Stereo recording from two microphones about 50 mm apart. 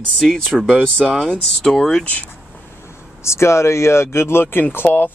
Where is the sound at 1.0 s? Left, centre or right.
Centre.